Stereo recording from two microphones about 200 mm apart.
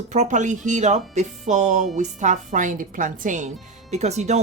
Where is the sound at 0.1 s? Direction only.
35° right (ahead or behind).